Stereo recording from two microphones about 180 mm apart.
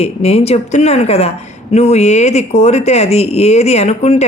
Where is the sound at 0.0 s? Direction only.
35° left (ahead or behind).